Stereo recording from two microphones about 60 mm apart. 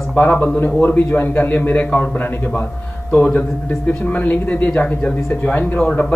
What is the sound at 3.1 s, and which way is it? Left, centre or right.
Speech, left.